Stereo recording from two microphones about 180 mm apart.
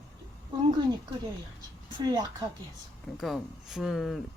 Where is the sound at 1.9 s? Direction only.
20° right (ahead or behind).